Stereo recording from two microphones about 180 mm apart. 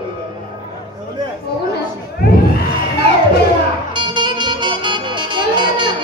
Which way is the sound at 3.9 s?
25° right (ahead or behind).